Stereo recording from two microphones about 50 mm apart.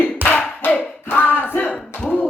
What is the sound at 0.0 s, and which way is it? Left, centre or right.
Hands, left.